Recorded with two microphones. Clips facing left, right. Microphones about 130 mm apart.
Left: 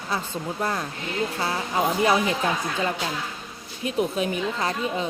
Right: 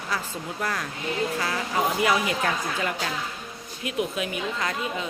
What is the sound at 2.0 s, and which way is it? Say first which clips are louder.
Speech: left 4 dB; 30° left (ahead or behind).